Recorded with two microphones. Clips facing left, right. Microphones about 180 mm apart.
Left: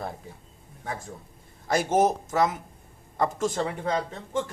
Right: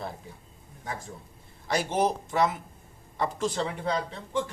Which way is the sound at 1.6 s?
45° left (ahead or behind).